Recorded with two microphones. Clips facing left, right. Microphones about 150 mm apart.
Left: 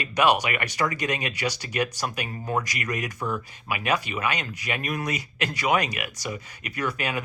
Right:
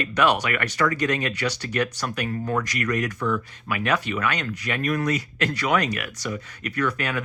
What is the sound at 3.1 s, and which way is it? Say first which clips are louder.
Speech: right 4 dB; 35° left (ahead or behind).